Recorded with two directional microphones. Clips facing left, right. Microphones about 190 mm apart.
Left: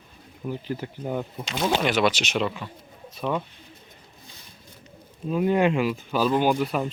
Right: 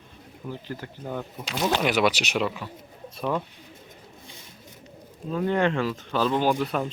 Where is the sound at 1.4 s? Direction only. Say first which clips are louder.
Right 3 dB; centre (ahead or behind).